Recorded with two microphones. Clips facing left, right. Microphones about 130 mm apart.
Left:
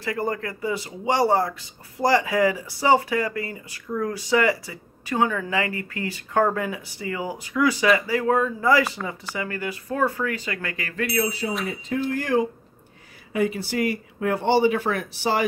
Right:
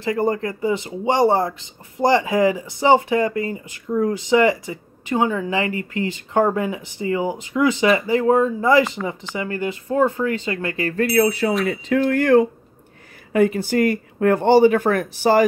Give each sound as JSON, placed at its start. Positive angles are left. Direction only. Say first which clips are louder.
{"t": 0.0, "sound": "speech", "louder": "right 6 dB", "side_deg": -25}
{"t": 11.1, "sound": "speech", "louder": "right 8 dB", "side_deg": -60}
{"t": 11.7, "sound": "speech", "louder": "right 7 dB", "side_deg": -85}